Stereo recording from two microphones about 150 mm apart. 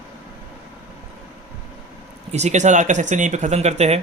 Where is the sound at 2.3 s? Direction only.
50° right (ahead or behind).